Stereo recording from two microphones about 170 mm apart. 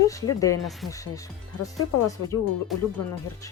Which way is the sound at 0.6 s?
Centre (ahead or behind).